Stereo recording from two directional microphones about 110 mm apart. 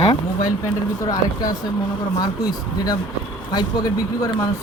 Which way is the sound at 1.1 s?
35° left (ahead or behind).